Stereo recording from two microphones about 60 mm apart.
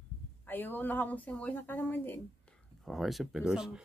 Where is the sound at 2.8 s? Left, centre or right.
Centre.